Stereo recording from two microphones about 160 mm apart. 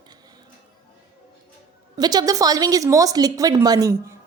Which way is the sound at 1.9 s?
25° right (ahead or behind).